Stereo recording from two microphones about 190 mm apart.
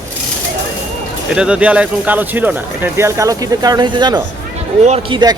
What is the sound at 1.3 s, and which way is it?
Speech, 5° right (ahead or behind).